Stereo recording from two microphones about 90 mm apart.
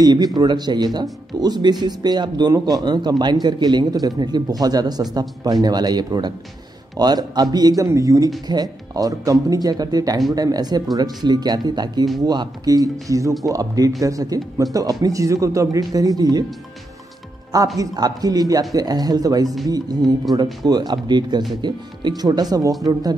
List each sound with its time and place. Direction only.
0.0 s speech: 45° right (ahead or behind)
17.7 s speech: 45° right (ahead or behind)